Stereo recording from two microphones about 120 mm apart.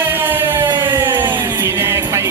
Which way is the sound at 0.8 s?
20° right (ahead or behind).